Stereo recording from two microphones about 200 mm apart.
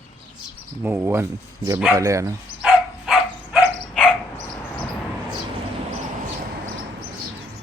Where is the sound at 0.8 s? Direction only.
10° right (ahead or behind).